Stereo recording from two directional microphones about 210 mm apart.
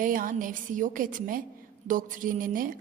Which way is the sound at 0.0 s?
40° right (ahead or behind).